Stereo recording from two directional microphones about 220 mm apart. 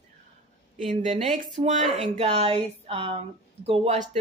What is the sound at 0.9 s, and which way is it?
Speech, 35° right (ahead or behind).